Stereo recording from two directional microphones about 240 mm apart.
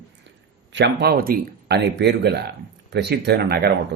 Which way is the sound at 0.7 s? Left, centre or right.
Right.